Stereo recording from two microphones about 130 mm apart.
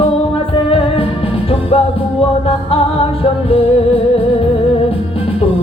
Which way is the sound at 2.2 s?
45° left (ahead or behind).